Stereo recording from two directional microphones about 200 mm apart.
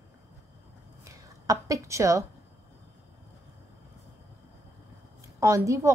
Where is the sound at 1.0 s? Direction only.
15° right (ahead or behind).